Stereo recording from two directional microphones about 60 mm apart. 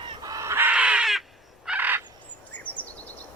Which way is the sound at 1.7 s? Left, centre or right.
Right.